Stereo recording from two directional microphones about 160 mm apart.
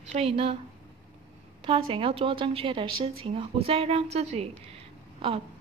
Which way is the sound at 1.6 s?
35° right (ahead or behind).